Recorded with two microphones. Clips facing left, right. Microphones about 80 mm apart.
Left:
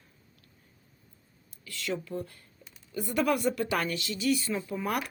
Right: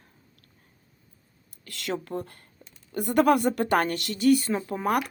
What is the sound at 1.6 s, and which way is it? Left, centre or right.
Speech, right.